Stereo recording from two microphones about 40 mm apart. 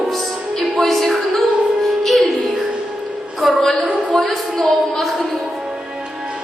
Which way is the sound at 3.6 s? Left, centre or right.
Centre.